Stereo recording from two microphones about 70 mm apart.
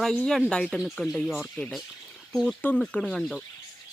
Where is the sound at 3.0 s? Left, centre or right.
Centre.